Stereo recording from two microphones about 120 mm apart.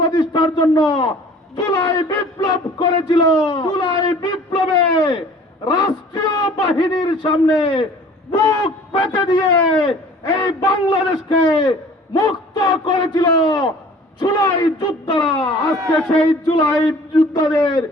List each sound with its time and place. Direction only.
0.0 s a man's voice: 35° left (ahead or behind)
8.4 s a man's voice: 35° left (ahead or behind)
15.8 s a man's voice: 10° left (ahead or behind)
16.5 s a man's voice: 35° left (ahead or behind)